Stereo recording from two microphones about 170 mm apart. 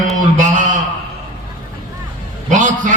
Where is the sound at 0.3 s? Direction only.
50° right (ahead or behind).